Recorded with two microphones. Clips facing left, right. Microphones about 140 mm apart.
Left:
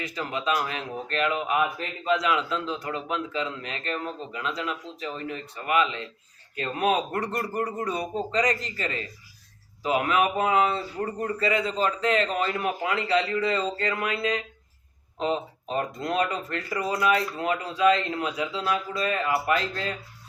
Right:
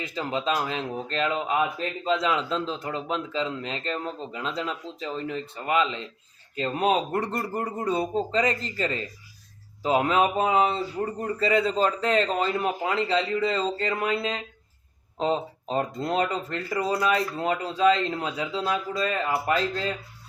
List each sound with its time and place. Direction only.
0.0 s a man's voice: 30° right (ahead or behind)